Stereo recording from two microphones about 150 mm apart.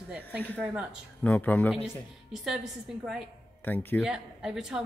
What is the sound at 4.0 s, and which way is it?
Speech, 5° right (ahead or behind).